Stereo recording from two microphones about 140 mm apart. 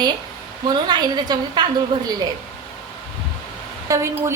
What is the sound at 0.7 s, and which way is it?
Speech, 30° right (ahead or behind).